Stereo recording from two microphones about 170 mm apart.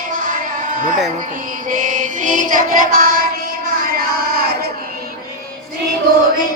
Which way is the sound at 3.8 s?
60° right (ahead or behind).